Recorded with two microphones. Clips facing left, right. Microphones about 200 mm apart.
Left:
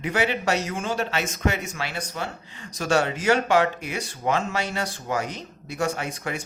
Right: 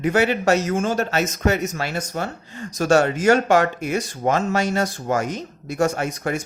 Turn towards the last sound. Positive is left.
turn(degrees=-45)  # may be behind; listen again after turning